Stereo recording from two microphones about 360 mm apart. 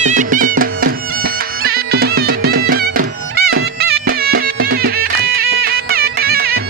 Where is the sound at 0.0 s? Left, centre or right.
Right.